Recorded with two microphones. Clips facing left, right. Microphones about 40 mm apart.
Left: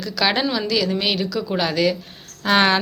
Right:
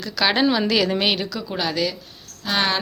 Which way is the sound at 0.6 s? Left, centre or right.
Right.